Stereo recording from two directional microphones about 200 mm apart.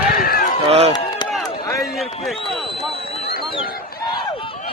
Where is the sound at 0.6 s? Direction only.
30° right (ahead or behind).